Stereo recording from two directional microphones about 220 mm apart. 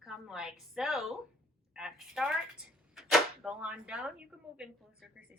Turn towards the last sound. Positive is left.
turn(degrees=-5)  # may be behind; listen again after turning